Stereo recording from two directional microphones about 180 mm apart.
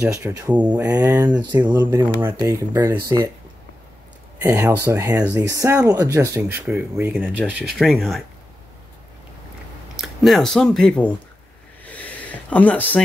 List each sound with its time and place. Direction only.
0.0 s speech: 15° right (ahead or behind)
0.8 s speech: 20° right (ahead or behind)
4.4 s speech: 10° right (ahead or behind)
7.7 s speech: centre (ahead or behind)
9.9 s speech: centre (ahead or behind)
11.8 s snort: 10° left (ahead or behind)